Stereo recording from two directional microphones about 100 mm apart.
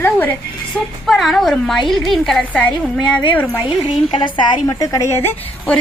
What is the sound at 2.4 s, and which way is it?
A woman's voice, 15° left (ahead or behind).